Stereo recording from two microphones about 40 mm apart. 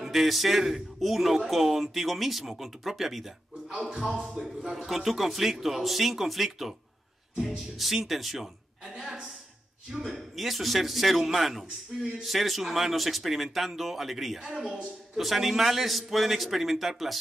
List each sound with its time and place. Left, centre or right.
0.0 s speech: centre
3.6 s speech: centre
4.7 s speech: centre
7.7 s a woman's voice: centre